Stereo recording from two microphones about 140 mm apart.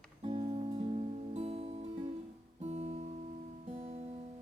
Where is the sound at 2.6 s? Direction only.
45° right (ahead or behind).